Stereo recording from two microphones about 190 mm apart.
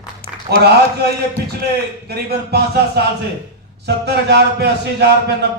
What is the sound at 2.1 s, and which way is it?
Speech, 55° right (ahead or behind).